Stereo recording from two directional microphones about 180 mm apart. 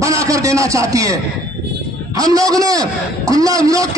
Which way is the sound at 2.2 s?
20° right (ahead or behind).